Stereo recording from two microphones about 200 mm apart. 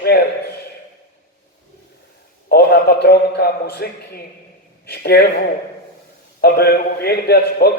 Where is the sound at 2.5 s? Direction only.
55° left (ahead or behind).